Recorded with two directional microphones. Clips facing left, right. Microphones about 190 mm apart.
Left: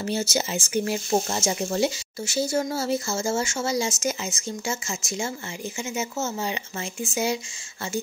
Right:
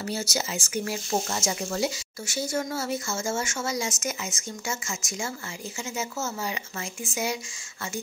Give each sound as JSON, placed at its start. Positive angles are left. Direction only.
{"t": 0.0, "sound": "speech", "side_deg": 25}